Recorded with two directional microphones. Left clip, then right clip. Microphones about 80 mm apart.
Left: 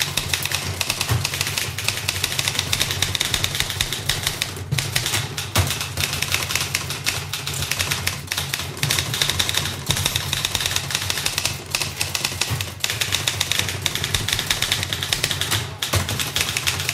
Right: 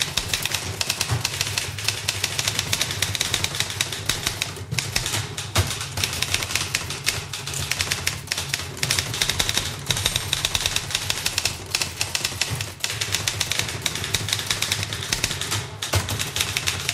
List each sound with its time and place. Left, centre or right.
3.7 s bird flight: centre
8.8 s typewriter: centre
10.4 s a sound: centre
11.7 s typewriter: centre